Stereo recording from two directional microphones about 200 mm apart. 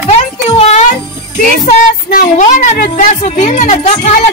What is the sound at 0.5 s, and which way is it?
Music, 30° left (ahead or behind).